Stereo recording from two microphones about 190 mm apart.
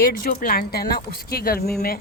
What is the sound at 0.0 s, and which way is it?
Speech, 50° left (ahead or behind).